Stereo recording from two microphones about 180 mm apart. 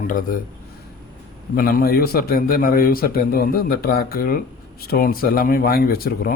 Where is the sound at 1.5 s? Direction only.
55° left (ahead or behind).